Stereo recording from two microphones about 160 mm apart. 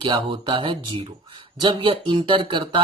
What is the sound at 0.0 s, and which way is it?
Speech, 30° right (ahead or behind).